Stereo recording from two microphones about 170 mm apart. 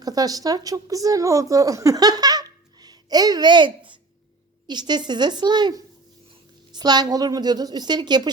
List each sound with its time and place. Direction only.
0.0 s a woman's voice: 20° right (ahead or behind)